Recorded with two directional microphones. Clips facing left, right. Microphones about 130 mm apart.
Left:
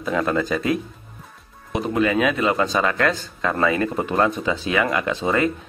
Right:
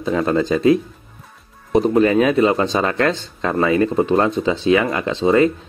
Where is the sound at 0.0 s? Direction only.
25° right (ahead or behind).